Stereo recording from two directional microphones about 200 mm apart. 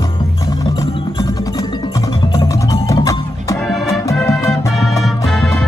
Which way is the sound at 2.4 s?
15° left (ahead or behind).